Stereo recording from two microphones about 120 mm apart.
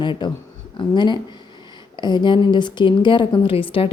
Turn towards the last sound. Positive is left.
turn(degrees=50)  # may be behind; listen again after turning